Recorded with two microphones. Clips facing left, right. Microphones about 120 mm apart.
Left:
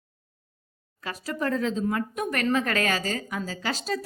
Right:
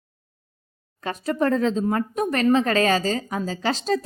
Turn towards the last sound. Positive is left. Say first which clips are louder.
# right 6 dB
turn(degrees=-35)  # may be behind; listen again after turning